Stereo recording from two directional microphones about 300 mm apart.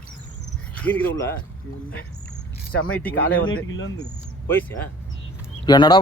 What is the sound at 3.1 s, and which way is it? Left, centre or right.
Speech, left.